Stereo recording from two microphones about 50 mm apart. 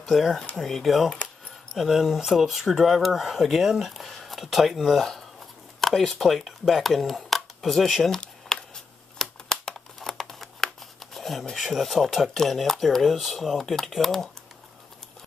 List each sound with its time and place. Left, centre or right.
0.1 s speech: centre
1.1 s keys jangling: left
1.8 s speech: centre
8.2 s a sound: centre
11.5 s speech: centre